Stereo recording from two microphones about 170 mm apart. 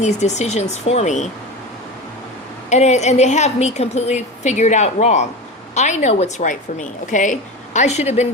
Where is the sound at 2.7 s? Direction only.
40° left (ahead or behind).